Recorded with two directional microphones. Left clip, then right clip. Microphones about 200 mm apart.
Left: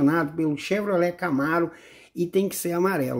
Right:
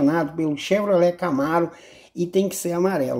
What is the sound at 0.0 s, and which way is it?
A woman's voice, 15° left (ahead or behind).